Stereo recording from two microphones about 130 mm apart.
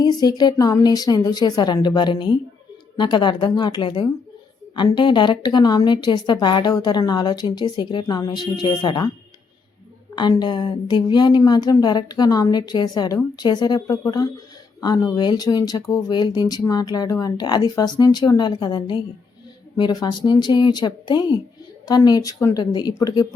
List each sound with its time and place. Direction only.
0.0 s a woman's voice: 30° left (ahead or behind)
10.2 s a woman's voice: 35° left (ahead or behind)